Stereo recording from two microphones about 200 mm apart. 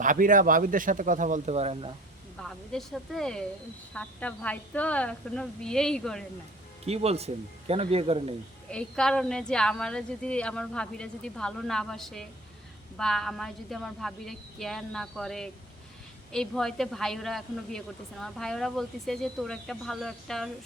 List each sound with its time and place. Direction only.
0.0 s speech: 40° right (ahead or behind)
2.4 s a woman's voice: centre (ahead or behind)
6.8 s speech: 30° right (ahead or behind)
8.7 s a woman's voice: 5° left (ahead or behind)